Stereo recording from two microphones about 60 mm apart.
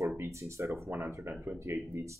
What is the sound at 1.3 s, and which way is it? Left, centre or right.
Speech, right.